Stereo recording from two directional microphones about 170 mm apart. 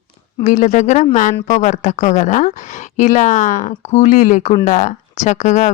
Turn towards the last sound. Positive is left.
turn(degrees=45)  # may be behind; listen again after turning